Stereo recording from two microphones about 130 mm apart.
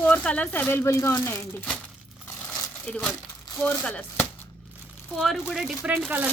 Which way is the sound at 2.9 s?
5° left (ahead or behind).